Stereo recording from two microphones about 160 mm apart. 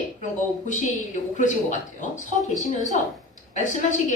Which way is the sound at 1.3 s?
50° left (ahead or behind).